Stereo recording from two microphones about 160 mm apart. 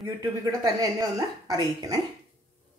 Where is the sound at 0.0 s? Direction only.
20° right (ahead or behind).